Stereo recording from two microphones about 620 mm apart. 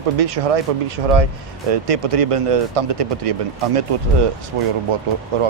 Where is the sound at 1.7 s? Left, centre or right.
Right.